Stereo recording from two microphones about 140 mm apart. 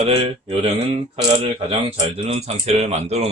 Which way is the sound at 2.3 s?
50° right (ahead or behind).